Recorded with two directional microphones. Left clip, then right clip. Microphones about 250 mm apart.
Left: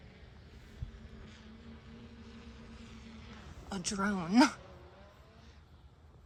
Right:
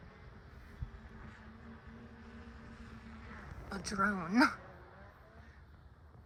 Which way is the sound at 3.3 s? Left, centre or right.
Centre.